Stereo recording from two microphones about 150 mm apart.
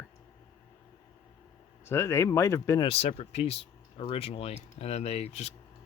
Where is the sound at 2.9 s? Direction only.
45° left (ahead or behind).